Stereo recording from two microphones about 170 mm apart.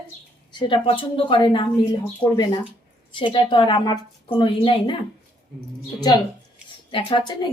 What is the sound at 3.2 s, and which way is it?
Speech, 30° left (ahead or behind).